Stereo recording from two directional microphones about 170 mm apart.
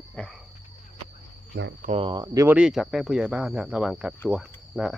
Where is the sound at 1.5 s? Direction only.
90° right.